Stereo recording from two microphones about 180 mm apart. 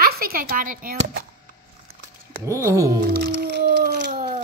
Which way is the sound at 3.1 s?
60° right (ahead or behind).